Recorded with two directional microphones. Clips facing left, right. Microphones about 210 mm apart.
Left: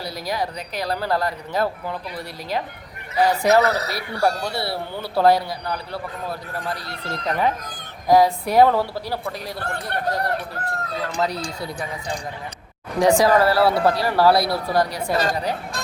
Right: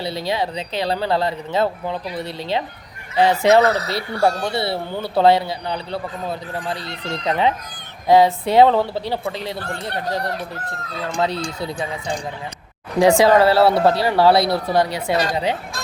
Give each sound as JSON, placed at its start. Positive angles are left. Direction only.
{"t": 0.0, "sound": "speech", "side_deg": -25}